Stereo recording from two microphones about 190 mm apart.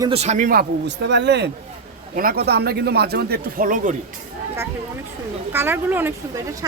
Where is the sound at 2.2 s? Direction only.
50° right (ahead or behind).